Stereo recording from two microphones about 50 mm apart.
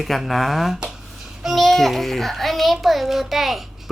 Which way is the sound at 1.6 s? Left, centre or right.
Centre.